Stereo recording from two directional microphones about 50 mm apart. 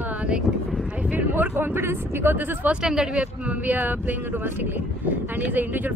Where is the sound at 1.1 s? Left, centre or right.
Right.